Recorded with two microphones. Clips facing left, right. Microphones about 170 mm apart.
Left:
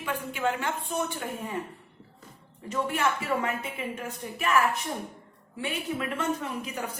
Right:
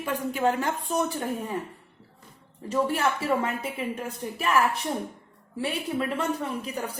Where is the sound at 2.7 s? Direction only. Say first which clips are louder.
Right 3 dB; 35° right (ahead or behind).